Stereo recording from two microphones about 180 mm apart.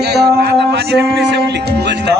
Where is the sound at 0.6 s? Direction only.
70° right (ahead or behind).